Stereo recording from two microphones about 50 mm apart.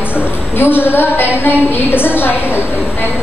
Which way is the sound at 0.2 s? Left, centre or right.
Left.